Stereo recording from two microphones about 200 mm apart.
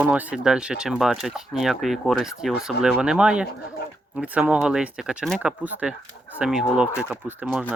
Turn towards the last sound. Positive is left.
turn(degrees=-5)  # may be behind; listen again after turning